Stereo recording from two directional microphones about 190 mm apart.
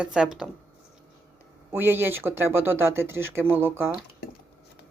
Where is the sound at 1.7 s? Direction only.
10° right (ahead or behind).